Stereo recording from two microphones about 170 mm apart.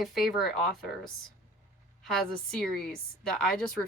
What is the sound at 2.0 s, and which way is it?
Speech, centre (ahead or behind).